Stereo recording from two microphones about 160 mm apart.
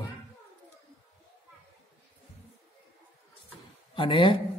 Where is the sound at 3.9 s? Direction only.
30° left (ahead or behind).